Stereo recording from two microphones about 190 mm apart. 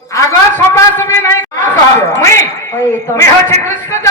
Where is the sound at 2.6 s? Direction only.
15° left (ahead or behind).